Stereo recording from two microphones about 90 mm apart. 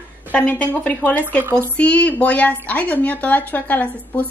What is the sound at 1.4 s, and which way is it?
Speech, 30° right (ahead or behind).